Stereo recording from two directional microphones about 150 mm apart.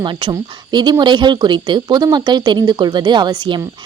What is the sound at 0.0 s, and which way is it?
A woman's voice, 30° right (ahead or behind).